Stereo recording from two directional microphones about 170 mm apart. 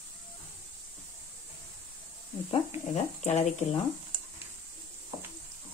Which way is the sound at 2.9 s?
40° left (ahead or behind).